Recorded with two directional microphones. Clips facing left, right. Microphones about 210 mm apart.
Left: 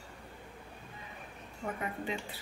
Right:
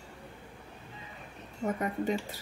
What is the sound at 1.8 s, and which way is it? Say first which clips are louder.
Speech: right 6 dB; 40° right (ahead or behind).